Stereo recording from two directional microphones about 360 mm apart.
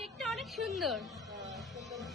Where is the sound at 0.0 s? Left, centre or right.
Centre.